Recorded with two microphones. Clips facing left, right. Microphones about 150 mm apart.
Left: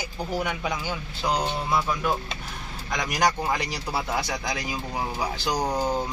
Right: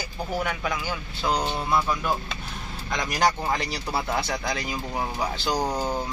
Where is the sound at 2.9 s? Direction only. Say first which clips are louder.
Right 1 dB; 15° left (ahead or behind).